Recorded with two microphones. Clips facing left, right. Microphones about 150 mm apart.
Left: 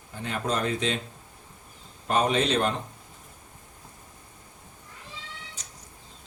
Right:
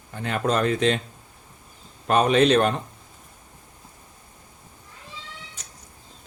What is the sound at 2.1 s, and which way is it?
Speech, 65° right (ahead or behind).